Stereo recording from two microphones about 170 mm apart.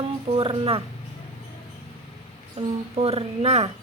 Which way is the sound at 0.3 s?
35° right (ahead or behind).